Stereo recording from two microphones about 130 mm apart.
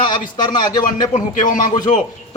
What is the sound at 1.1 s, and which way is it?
Speech, 80° left.